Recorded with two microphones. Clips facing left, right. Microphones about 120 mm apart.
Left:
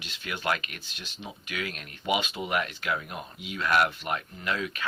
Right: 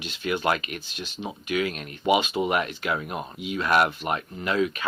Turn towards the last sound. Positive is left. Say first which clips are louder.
# right 7 dB
turn(degrees=-25)  # may be behind; listen again after turning